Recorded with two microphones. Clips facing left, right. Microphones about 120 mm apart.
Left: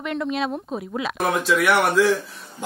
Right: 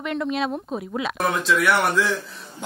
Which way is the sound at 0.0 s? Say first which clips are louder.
Even; centre (ahead or behind).